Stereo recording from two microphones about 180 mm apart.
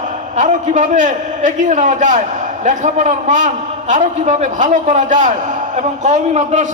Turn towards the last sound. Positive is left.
turn(degrees=-40)  # may be behind; listen again after turning